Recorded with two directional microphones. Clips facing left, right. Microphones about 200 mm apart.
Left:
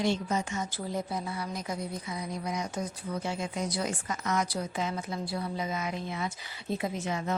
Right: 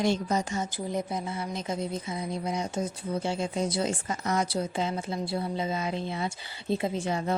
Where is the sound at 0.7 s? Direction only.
20° right (ahead or behind).